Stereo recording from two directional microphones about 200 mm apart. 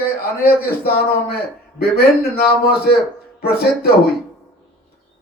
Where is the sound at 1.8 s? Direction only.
50° left (ahead or behind).